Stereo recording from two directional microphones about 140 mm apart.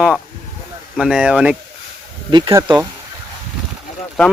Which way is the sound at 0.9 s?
5° right (ahead or behind).